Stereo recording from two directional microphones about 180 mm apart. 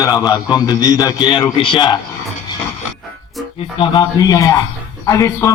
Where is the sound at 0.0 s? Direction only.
20° left (ahead or behind).